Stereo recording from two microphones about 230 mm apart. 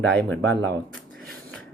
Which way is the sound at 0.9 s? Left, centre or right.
Centre.